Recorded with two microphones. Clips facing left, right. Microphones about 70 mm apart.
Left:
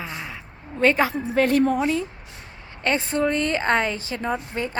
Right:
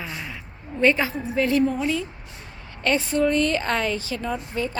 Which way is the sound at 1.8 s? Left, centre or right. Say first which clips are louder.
Left 2 dB; left.